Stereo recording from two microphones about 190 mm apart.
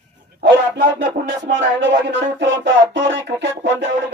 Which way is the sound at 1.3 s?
80° right.